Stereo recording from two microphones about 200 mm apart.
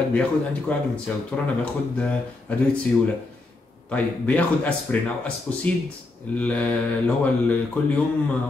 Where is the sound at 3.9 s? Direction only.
5° left (ahead or behind).